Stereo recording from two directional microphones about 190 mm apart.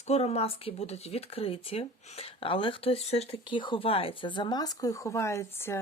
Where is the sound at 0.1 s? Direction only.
35° left (ahead or behind).